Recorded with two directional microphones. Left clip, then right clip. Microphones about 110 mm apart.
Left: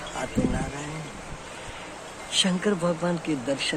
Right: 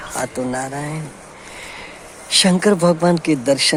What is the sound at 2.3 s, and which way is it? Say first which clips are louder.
Speech: right 10 dB; 90° right.